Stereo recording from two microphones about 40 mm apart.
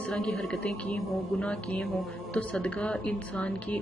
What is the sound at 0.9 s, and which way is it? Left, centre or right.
Speech, left.